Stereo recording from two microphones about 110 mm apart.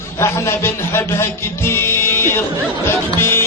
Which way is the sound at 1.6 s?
20° left (ahead or behind).